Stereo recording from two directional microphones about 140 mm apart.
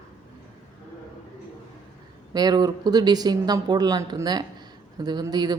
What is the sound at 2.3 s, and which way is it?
Speech, 30° right (ahead or behind).